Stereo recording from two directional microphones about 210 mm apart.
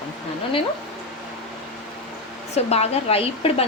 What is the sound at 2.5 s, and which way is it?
A woman's voice, 30° left (ahead or behind).